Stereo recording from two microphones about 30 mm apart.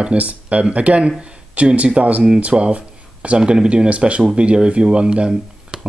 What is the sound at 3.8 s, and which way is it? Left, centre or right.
Speech, right.